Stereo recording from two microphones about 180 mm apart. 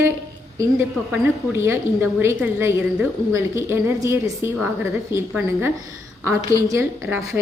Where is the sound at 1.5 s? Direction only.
15° right (ahead or behind).